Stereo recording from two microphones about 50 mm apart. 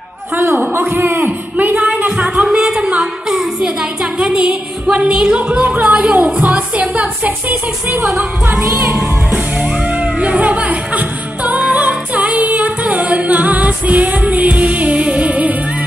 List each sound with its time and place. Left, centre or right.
0.7 s a man's voice: right
1.2 s a sound: right
2.1 s a sound: centre
3.0 s music: centre
6.4 s speech: right
9.0 s music: right